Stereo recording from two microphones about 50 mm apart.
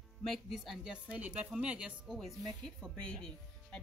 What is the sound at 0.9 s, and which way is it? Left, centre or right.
Speech, right.